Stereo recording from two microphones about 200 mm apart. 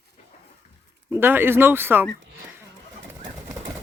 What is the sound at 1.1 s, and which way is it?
Speech, 10° right (ahead or behind).